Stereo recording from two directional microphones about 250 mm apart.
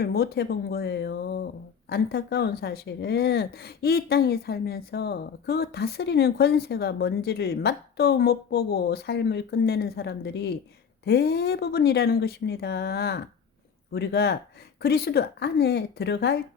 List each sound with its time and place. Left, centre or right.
0.0 s speech: left